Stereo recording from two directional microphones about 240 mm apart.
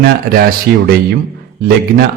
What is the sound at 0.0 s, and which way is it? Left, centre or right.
A man's voice, right.